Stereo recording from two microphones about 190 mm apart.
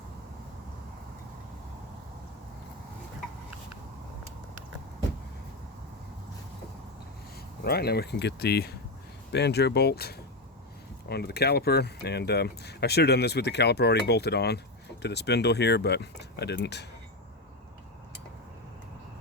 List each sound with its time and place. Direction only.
7.6 s speech: 55° left (ahead or behind)